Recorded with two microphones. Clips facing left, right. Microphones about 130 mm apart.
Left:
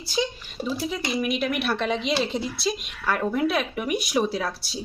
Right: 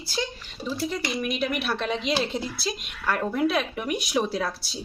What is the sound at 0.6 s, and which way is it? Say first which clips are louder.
Speech: left 1 dB; centre (ahead or behind).